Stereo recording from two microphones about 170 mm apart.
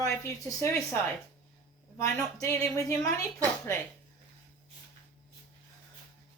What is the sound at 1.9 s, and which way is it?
A woman's voice, 20° left (ahead or behind).